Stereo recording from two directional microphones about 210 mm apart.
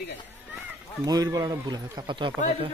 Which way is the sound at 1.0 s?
15° right (ahead or behind).